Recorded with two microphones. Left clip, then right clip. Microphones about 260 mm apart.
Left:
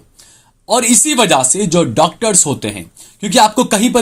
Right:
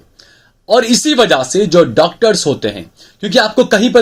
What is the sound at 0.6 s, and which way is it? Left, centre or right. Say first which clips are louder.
Speech: right 3 dB; left.